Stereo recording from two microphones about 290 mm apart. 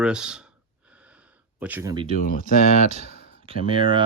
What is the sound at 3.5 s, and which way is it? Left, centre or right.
Speech, centre.